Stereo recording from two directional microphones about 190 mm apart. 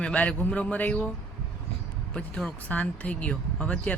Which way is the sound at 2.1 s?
5° left (ahead or behind).